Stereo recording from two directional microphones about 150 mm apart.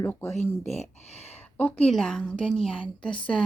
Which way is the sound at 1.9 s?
5° left (ahead or behind).